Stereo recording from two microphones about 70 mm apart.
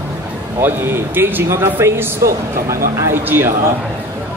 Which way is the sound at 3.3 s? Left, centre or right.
Right.